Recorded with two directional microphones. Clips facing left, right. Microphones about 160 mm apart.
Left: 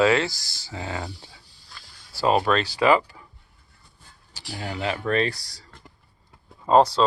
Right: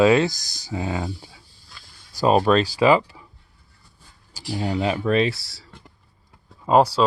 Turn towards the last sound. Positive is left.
turn(degrees=-10)  # may be behind; listen again after turning